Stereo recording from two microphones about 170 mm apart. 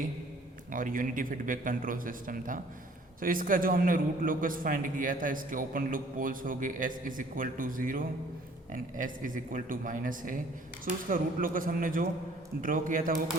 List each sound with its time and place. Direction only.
0.7 s a man's voice: 55° right (ahead or behind)